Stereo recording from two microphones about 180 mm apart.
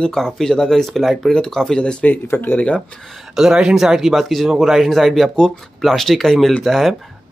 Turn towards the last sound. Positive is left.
turn(degrees=0)  # may be behind; listen again after turning